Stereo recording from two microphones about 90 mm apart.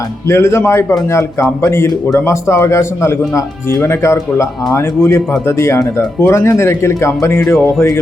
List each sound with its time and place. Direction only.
0.3 s speech: 30° left (ahead or behind)